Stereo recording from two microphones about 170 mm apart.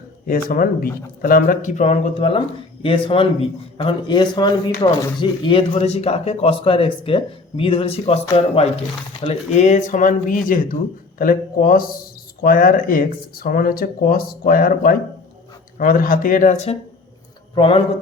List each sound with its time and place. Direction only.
0.3 s speech: 55° left (ahead or behind)
17.5 s speech: 30° left (ahead or behind)